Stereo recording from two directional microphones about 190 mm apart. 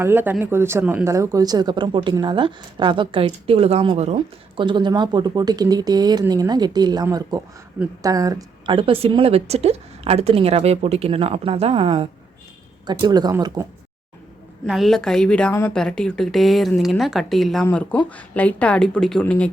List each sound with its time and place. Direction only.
0.0 s speech: 10° right (ahead or behind)
14.7 s a woman's voice: centre (ahead or behind)